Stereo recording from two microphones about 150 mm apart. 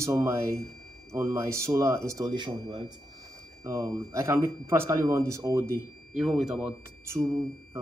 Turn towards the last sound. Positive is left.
turn(degrees=-20)  # may be behind; listen again after turning